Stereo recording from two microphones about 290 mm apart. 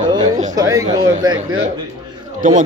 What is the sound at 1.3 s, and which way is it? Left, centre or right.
Speech, right.